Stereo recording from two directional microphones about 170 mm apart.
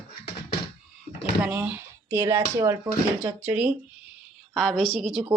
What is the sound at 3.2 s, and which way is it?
Speech, 10° right (ahead or behind).